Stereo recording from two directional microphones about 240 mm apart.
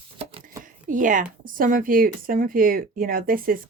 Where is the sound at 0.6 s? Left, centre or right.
Right.